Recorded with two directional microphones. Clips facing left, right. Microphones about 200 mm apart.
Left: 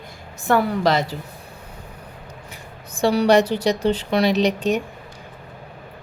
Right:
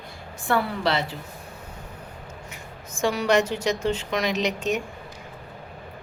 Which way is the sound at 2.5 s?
35° left (ahead or behind).